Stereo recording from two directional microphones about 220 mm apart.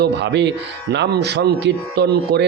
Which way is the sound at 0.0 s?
50° right (ahead or behind).